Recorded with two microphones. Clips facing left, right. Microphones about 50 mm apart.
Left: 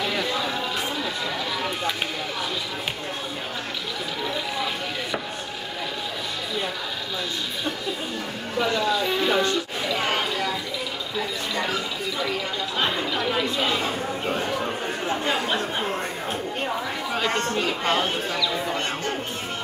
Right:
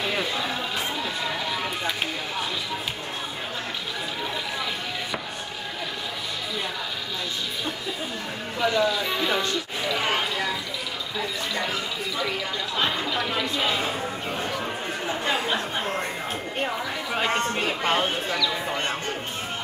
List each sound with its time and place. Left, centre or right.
8.7 s a sound: centre
12.7 s chatter: centre
17.1 s speech: right